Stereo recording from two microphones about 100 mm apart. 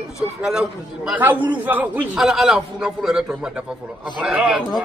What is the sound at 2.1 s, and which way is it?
A man's voice, 5° right (ahead or behind).